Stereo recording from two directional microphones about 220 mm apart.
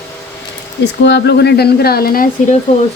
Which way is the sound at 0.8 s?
50° left (ahead or behind).